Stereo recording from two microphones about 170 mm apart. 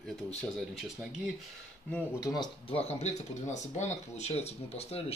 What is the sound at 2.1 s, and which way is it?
Speech, 20° left (ahead or behind).